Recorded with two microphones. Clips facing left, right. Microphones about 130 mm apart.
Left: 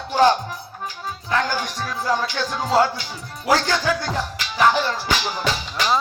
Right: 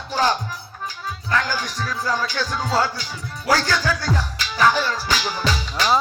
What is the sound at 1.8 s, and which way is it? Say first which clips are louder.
Speech: left 1 dB; 20° left (ahead or behind).